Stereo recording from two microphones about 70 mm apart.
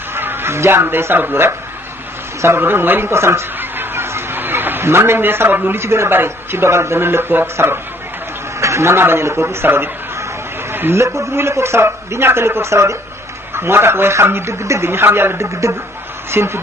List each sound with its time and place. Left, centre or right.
0.1 s a man's voice: right
10.7 s a sound: right
11.2 s a man's voice: right